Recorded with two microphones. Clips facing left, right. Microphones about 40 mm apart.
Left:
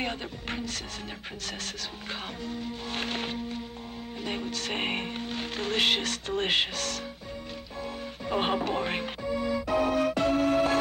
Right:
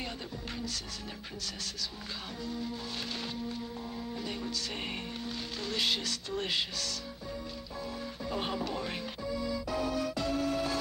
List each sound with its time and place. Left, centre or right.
0.0 s music: left
2.4 s speech: left
8.3 s music: left